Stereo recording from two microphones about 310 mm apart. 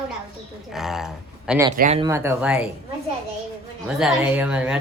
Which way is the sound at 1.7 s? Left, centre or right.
Right.